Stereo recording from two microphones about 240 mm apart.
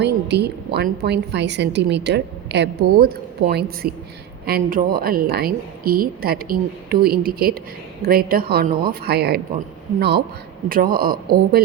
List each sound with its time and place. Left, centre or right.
0.0 s a woman's voice: right